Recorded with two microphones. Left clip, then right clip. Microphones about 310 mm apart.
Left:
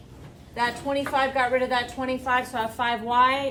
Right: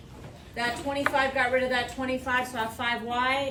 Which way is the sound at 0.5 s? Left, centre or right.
Centre.